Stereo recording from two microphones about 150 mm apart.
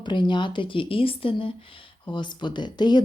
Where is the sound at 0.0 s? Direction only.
30° left (ahead or behind).